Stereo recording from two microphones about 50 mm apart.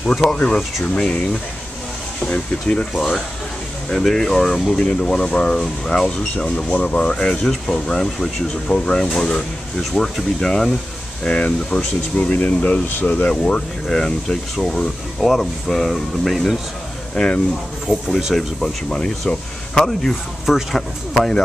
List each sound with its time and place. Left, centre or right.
0.1 s speech: centre
0.8 s speech: centre
2.2 s speech: centre
3.9 s speech: centre
6.0 s speech: centre
11.2 s speech: left
12.2 s speech: left
12.5 s speech: left
13.8 s speech: centre